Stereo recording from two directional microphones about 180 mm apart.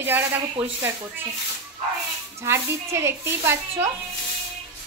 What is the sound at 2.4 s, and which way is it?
A woman's voice, 15° right (ahead or behind).